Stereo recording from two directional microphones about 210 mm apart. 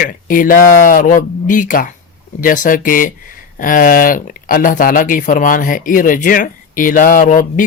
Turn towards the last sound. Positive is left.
turn(degrees=40)  # may be behind; listen again after turning